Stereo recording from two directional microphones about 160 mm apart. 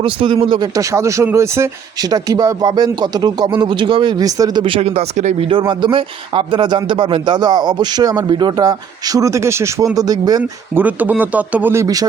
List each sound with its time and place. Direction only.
0.0 s speech: 35° right (ahead or behind)
5.5 s speech: 30° right (ahead or behind)
10.8 s speech: 10° right (ahead or behind)